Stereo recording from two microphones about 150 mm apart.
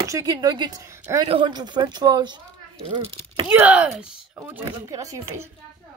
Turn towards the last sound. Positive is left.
turn(degrees=-20)  # may be behind; listen again after turning